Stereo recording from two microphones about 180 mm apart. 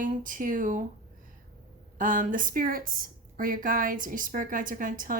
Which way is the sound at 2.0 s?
50° right (ahead or behind).